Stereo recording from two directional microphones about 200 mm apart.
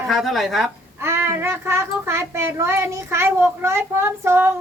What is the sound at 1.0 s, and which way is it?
Child singing, 10° right (ahead or behind).